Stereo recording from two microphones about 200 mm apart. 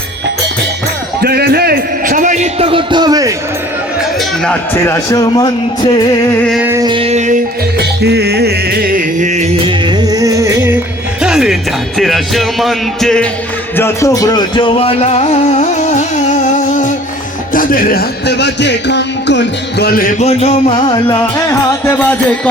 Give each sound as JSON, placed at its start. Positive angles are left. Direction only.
{"t": 1.2, "sound": "a man's voice", "side_deg": -50}
{"t": 4.4, "sound": "a man's voice", "side_deg": 10}
{"t": 6.5, "sound": "a sound", "side_deg": -10}
{"t": 6.8, "sound": "a man's voice", "side_deg": -25}
{"t": 7.8, "sound": "music", "side_deg": -55}
{"t": 11.2, "sound": "music", "side_deg": -5}
{"t": 11.9, "sound": "speech", "side_deg": 0}
{"t": 13.7, "sound": "speech", "side_deg": 15}
{"t": 20.2, "sound": "a man's voice", "side_deg": 30}
{"t": 21.8, "sound": "music", "side_deg": 10}